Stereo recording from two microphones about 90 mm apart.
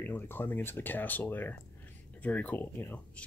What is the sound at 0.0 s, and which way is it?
Speech, 20° left (ahead or behind).